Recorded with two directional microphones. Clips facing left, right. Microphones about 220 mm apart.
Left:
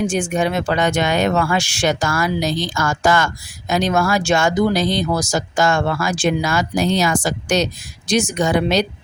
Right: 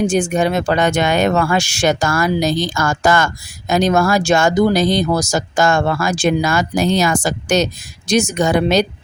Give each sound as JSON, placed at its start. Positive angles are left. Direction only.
{"t": 0.1, "sound": "speech", "side_deg": -40}